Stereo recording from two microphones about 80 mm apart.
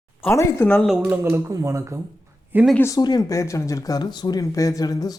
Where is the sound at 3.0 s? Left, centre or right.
Left.